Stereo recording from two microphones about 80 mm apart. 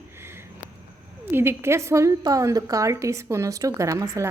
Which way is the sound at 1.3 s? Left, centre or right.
Right.